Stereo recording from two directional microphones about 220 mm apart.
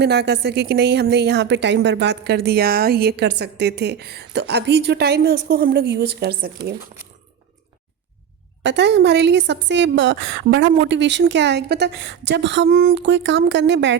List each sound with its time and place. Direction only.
0.0 s a woman's voice: 50° right (ahead or behind)
8.6 s a woman's voice: 55° right (ahead or behind)